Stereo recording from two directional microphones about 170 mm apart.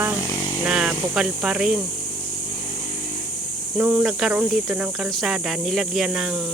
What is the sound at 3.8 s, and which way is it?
Speech, 10° right (ahead or behind).